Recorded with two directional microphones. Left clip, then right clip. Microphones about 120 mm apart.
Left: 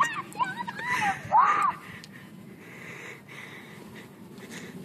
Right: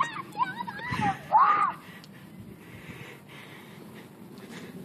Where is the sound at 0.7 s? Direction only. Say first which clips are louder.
Left 3 dB; centre (ahead or behind).